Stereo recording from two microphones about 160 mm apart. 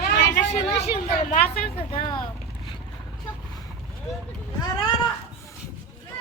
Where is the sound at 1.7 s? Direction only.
30° left (ahead or behind).